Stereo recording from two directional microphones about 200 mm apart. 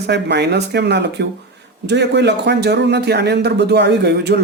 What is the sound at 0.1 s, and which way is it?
A man's voice, 55° right (ahead or behind).